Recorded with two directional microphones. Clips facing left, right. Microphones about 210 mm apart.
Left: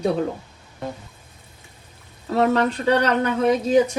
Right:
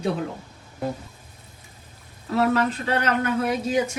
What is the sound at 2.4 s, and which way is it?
Speech, 40° left (ahead or behind).